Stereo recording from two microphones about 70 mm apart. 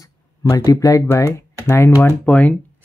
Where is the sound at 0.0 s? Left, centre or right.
Left.